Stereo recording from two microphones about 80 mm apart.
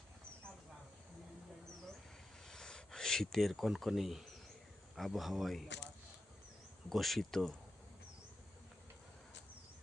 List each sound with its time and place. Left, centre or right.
2.5 s a sound: centre
4.9 s a man's voice: centre
6.9 s a man's voice: centre